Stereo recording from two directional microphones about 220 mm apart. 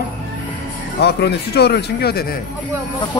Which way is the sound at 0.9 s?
50° left (ahead or behind).